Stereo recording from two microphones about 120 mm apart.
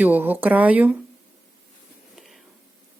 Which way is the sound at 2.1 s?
Centre (ahead or behind).